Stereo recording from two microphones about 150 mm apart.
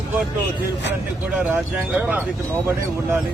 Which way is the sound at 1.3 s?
10° right (ahead or behind).